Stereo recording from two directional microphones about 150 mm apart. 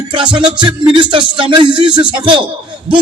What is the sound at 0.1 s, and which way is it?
Music, 30° right (ahead or behind).